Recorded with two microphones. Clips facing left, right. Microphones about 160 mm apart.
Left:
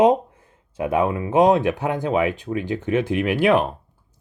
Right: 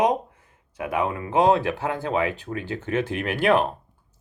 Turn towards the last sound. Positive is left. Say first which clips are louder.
# left 3 dB
turn(degrees=10)  # may be behind; listen again after turning